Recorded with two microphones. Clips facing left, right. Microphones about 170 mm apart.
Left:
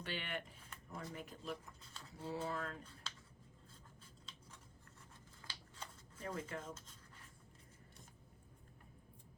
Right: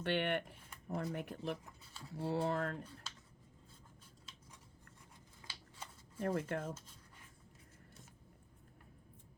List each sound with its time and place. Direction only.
0.0 s speech: 60° right (ahead or behind)
5.5 s scissors: 5° right (ahead or behind)
6.1 s speech: 60° right (ahead or behind)